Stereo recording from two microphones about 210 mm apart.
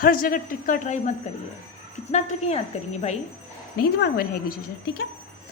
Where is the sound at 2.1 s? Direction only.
30° left (ahead or behind).